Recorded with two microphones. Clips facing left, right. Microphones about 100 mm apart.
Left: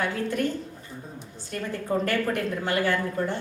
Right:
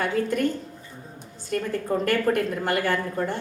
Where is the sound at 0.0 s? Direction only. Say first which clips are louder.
Right 3 dB; 50° right (ahead or behind).